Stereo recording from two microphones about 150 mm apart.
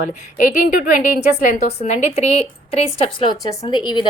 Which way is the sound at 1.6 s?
45° left (ahead or behind).